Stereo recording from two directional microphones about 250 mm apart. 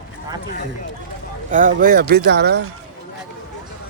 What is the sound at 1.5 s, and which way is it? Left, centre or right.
Speech, right.